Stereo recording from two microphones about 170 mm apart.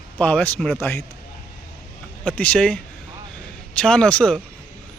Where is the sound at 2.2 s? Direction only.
10° left (ahead or behind).